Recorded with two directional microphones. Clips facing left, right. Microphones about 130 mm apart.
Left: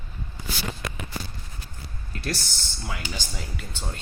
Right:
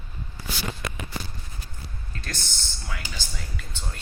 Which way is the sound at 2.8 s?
20° left (ahead or behind).